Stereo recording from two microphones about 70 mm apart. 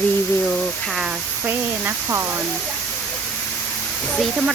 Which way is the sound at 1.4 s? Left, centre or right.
Right.